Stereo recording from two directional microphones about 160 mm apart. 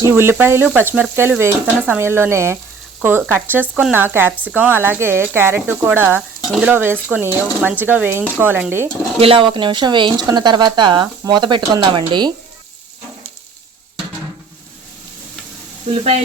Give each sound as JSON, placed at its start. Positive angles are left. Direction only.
{"t": 0.0, "sound": "speech", "side_deg": -15}
{"t": 9.1, "sound": "speech", "side_deg": -35}
{"t": 15.9, "sound": "speech", "side_deg": -40}